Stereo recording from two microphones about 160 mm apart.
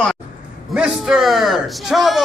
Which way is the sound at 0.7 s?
5° right (ahead or behind).